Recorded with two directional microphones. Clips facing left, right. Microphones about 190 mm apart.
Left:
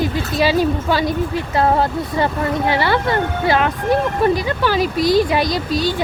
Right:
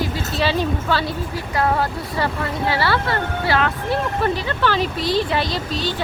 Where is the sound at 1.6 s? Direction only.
25° left (ahead or behind).